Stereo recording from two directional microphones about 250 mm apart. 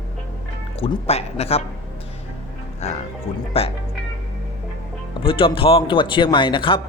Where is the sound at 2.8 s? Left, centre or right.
Left.